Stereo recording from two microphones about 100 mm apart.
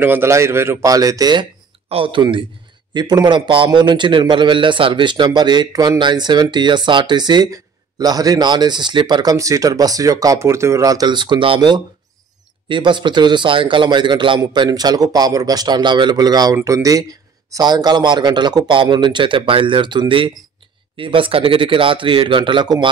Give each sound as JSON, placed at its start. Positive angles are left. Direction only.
{"t": 0.0, "sound": "speech", "side_deg": -20}
{"t": 1.9, "sound": "speech", "side_deg": -65}
{"t": 2.9, "sound": "a man's voice", "side_deg": -45}